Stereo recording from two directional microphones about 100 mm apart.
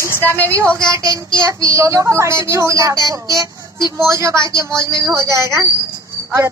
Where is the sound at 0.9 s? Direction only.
40° right (ahead or behind).